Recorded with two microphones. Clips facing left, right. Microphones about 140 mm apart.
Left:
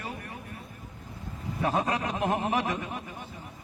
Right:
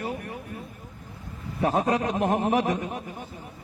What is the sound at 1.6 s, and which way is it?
A man's voice, 30° right (ahead or behind).